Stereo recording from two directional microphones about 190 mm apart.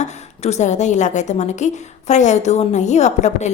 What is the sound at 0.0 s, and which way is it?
A woman's voice, 35° left (ahead or behind).